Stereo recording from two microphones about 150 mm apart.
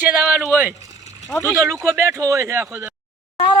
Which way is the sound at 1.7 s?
15° right (ahead or behind).